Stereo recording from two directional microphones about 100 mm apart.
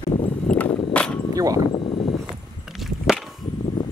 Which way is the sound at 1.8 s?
60° left (ahead or behind).